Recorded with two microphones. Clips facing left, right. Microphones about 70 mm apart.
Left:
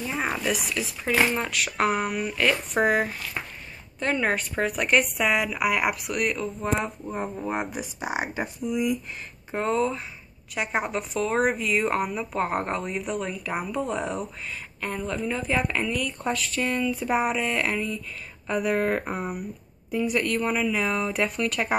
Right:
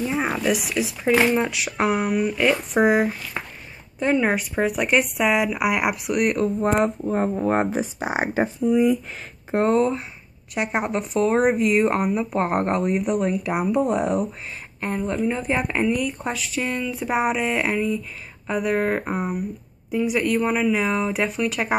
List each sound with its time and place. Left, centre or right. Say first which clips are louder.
0.0 s speech: right 5 dB; centre
6.6 s speech: right 6 dB; right
7.1 s speech: right 8 dB; right
10.5 s speech: right 3 dB; centre
11.7 s speech: right 5 dB; right
12.0 s speech: right 5 dB; centre
15.0 s speech: right 5 dB; right
16.0 s speech: right 2 dB; centre